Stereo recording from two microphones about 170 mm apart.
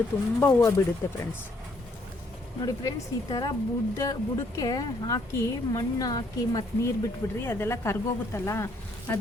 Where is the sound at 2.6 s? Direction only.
20° left (ahead or behind).